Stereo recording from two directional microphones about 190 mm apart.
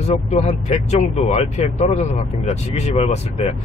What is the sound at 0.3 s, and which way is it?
Speech, 35° left (ahead or behind).